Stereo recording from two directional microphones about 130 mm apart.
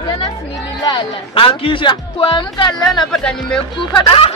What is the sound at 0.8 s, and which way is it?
A woman's voice, 40° left (ahead or behind).